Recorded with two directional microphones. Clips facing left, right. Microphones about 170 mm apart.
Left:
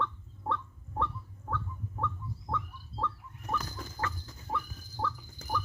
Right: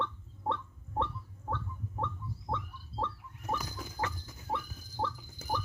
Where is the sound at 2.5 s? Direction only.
15° right (ahead or behind).